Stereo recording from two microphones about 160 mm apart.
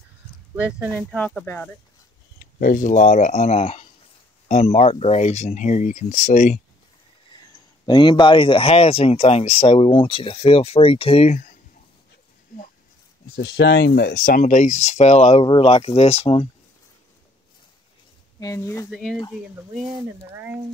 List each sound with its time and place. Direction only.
0.6 s speech: 10° right (ahead or behind)
1.1 s speech: 10° left (ahead or behind)
2.3 s speech: 65° left (ahead or behind); by 6.6 s 45° left (ahead or behind)
7.8 s speech: 30° left (ahead or behind)
13.3 s speech: 90° left; by 16.4 s 40° left (ahead or behind)
18.4 s speech: 20° left (ahead or behind)
18.9 s speech: centre (ahead or behind)